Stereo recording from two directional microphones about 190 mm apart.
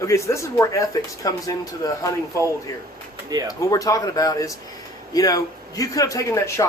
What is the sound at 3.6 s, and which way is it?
Speech, 20° left (ahead or behind).